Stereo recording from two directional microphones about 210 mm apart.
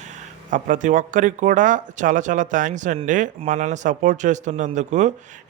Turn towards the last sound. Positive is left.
turn(degrees=-35)  # may be behind; listen again after turning